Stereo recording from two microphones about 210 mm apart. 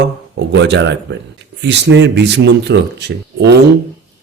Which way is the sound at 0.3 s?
55° right (ahead or behind).